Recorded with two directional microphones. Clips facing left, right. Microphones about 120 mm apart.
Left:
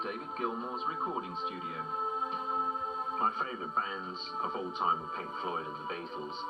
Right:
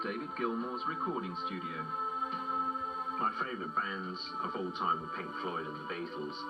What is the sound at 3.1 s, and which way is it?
Speech, 35° left (ahead or behind).